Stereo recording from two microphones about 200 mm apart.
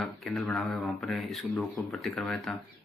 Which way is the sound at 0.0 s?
Centre (ahead or behind).